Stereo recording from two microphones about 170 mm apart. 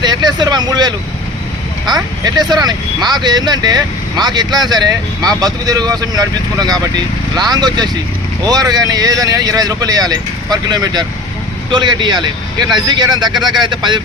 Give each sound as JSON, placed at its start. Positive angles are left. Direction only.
{"t": 0.0, "sound": "speech", "side_deg": -25}